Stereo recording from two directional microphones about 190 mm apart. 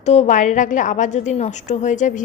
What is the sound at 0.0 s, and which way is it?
A woman's voice, 35° left (ahead or behind).